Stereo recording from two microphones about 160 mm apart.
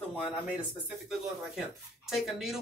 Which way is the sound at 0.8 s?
Centre (ahead or behind).